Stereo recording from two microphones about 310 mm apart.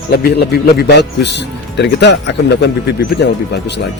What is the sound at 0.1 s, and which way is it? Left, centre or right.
A man's voice, left.